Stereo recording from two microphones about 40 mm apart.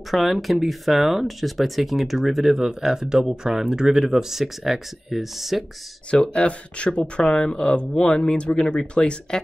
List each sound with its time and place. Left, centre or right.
0.1 s speech: centre
6.0 s speech: left